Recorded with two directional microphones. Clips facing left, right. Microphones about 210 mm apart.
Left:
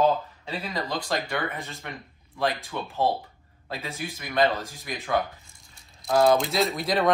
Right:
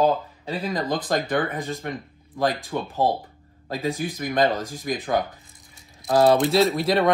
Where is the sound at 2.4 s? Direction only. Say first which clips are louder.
Right 4 dB; 40° right (ahead or behind).